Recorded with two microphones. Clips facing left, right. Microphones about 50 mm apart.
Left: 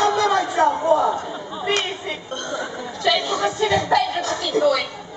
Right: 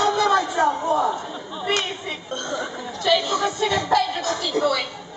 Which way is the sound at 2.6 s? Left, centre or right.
Centre.